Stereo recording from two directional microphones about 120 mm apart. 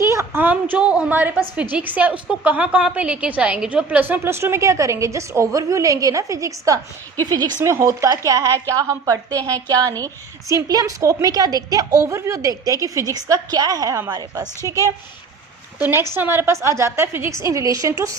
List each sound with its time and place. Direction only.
0.1 s a woman's voice: 20° right (ahead or behind)
7.6 s a woman's voice: 25° right (ahead or behind)
16.1 s a woman's voice: 20° right (ahead or behind)